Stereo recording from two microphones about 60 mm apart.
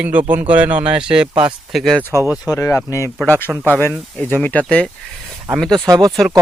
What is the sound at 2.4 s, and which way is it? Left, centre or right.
Speech, left.